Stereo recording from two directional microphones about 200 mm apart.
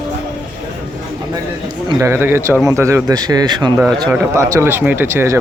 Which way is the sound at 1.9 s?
15° right (ahead or behind).